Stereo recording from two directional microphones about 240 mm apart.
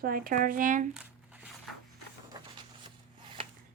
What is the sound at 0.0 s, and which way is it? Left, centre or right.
Speech, right.